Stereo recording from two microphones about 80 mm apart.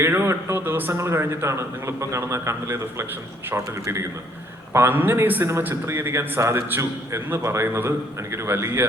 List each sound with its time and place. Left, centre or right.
0.0 s a man's voice: right
4.7 s a man's voice: right